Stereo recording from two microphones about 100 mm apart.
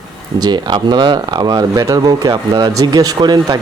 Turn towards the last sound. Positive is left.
turn(degrees=-40)  # may be behind; listen again after turning